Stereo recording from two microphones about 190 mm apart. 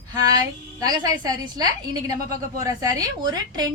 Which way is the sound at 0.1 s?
20° right (ahead or behind).